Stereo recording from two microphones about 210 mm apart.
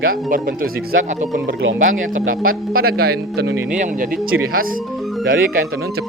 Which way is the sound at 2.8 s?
45° right (ahead or behind).